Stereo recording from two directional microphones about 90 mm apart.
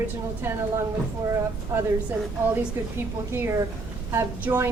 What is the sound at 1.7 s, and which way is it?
Speech, 30° right (ahead or behind).